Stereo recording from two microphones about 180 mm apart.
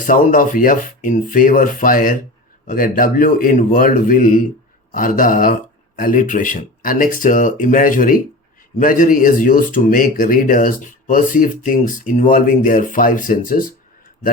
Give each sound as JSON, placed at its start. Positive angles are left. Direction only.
{"t": 0.0, "sound": "speech", "side_deg": 45}